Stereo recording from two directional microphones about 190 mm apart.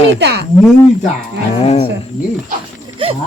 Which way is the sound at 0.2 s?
60° right (ahead or behind).